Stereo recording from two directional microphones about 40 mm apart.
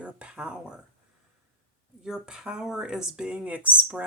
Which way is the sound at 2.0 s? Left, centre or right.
Centre.